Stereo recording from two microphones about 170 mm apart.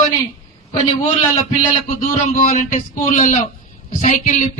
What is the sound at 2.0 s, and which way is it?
A man's voice, 45° left (ahead or behind).